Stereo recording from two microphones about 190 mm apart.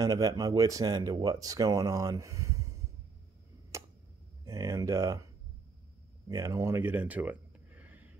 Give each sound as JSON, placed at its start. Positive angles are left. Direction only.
{"t": 0.0, "sound": "speech", "side_deg": -20}
{"t": 3.7, "sound": "tick", "side_deg": -15}
{"t": 4.5, "sound": "speech", "side_deg": -15}
{"t": 6.2, "sound": "a sound", "side_deg": -15}